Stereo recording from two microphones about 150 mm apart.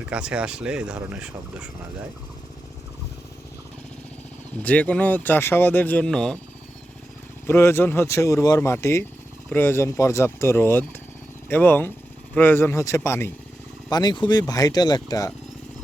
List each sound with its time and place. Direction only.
0.0 s speech: 5° right (ahead or behind)
4.6 s speech: 10° left (ahead or behind)
7.4 s speech: 15° left (ahead or behind)
13.9 s speech: 30° left (ahead or behind)